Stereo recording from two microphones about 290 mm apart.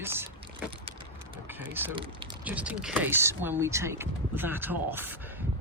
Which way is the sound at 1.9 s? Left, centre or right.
Centre.